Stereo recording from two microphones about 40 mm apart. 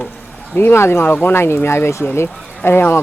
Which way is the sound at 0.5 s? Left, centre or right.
Left.